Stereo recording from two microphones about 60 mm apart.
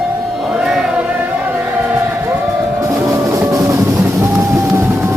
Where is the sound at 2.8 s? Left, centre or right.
Right.